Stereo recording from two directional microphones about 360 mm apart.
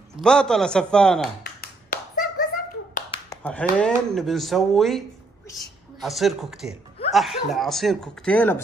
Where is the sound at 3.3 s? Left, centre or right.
Centre.